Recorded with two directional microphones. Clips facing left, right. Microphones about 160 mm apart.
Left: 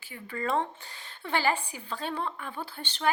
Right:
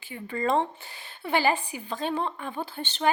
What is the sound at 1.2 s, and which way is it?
A woman's voice, 15° right (ahead or behind).